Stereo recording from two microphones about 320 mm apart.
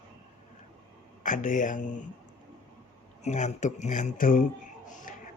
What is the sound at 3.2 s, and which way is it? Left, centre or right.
A man's voice, left.